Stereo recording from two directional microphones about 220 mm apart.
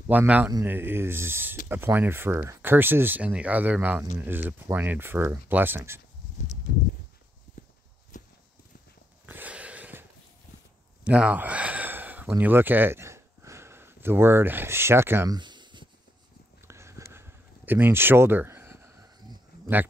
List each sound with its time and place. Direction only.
0.1 s speech: 10° right (ahead or behind)
7.6 s horse: 35° left (ahead or behind)
8.1 s walk: 35° left (ahead or behind)
9.2 s a sound: 5° right (ahead or behind)
11.1 s speech: 5° right (ahead or behind)
16.6 s a sound: 10° right (ahead or behind)